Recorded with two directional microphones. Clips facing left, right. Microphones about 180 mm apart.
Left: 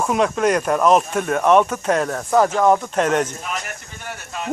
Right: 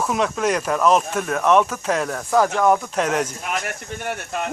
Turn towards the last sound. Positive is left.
turn(degrees=-60)  # may be behind; listen again after turning